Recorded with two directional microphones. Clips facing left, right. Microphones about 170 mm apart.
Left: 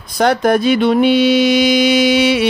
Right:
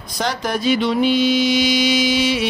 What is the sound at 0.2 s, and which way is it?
Mantra, 55° left (ahead or behind).